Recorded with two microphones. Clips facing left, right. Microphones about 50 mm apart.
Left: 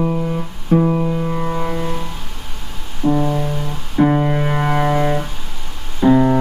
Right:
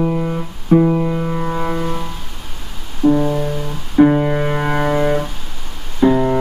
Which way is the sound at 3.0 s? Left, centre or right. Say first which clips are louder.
Right 3 dB; centre.